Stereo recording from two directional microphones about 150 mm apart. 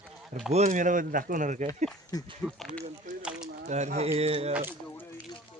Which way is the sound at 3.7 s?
50° right (ahead or behind).